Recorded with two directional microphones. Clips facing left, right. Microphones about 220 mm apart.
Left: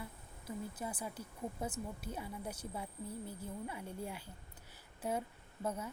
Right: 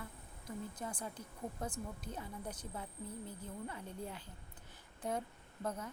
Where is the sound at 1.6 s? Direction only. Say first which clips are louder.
Left 1 dB; 10° left (ahead or behind).